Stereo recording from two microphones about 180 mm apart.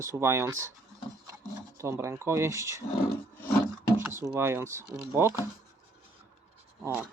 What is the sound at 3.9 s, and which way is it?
Speech, 15° right (ahead or behind).